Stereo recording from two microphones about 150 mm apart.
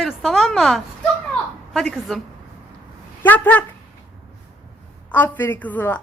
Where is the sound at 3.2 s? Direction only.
10° left (ahead or behind).